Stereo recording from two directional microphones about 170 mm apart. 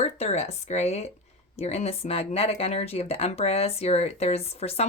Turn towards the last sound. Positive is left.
turn(degrees=35)  # may be behind; listen again after turning